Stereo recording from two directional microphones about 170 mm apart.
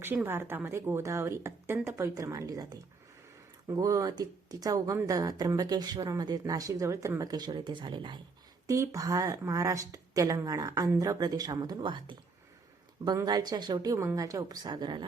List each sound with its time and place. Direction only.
0.0 s speech: 10° right (ahead or behind)